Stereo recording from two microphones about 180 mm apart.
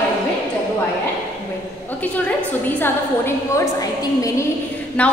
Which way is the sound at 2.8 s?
15° left (ahead or behind).